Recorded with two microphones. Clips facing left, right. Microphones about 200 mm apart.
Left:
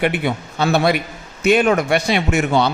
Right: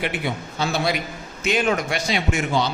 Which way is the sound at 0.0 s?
60° left (ahead or behind).